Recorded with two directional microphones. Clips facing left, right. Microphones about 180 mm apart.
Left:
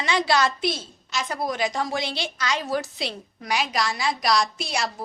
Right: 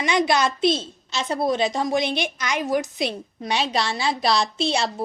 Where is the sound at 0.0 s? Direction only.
20° right (ahead or behind).